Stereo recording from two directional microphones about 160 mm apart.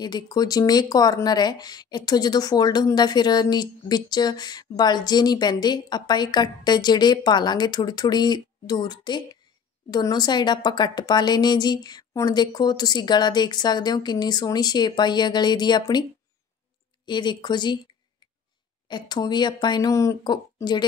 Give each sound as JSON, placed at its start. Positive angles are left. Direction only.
{"t": 0.0, "sound": "speech", "side_deg": 25}
{"t": 18.9, "sound": "speech", "side_deg": 25}